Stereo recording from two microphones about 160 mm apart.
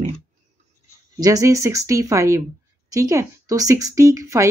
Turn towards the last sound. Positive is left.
turn(degrees=-20)  # may be behind; listen again after turning